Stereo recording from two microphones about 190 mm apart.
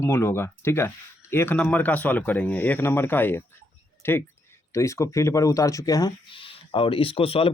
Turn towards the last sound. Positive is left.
turn(degrees=30)  # may be behind; listen again after turning